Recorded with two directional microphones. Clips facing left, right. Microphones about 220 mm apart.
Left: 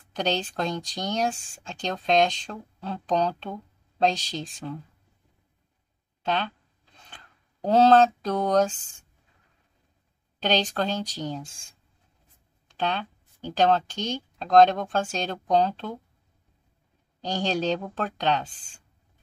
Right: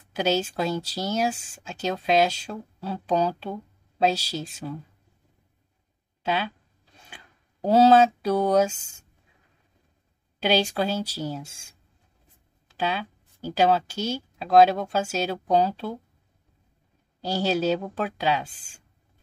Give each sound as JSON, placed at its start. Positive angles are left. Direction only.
{"t": 0.1, "sound": "speech", "side_deg": -5}
{"t": 6.2, "sound": "speech", "side_deg": -10}
{"t": 10.4, "sound": "speech", "side_deg": -10}
{"t": 12.6, "sound": "speech", "side_deg": -5}
{"t": 17.2, "sound": "speech", "side_deg": -5}